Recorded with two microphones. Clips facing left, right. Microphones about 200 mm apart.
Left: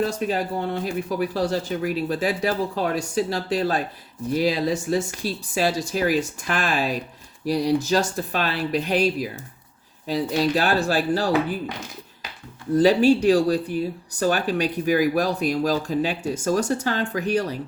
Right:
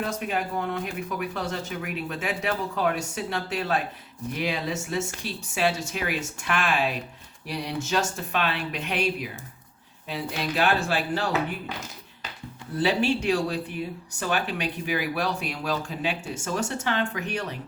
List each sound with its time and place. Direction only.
0.0 s speech: 35° left (ahead or behind)
12.7 s speech: 40° left (ahead or behind)